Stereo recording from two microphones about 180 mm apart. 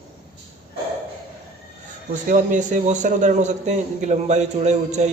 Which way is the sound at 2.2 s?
45° right (ahead or behind).